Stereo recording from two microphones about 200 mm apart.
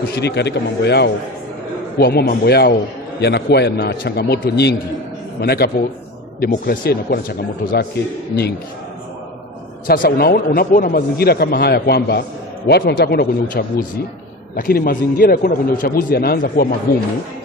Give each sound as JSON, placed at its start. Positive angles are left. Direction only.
{"t": 0.1, "sound": "a man's voice", "side_deg": 55}
{"t": 9.8, "sound": "speech", "side_deg": 50}